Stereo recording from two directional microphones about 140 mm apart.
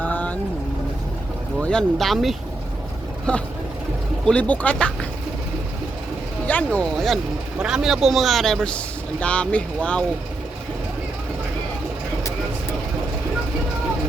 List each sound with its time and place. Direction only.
0.0 s vehicle: 10° left (ahead or behind)
1.6 s speech: 5° left (ahead or behind)
6.5 s speech: 10° left (ahead or behind)